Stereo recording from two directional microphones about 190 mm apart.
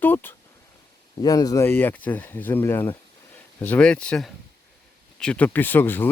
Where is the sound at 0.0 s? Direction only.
10° left (ahead or behind).